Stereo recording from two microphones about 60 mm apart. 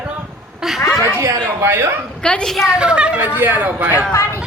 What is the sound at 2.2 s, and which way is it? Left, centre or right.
Speech, centre.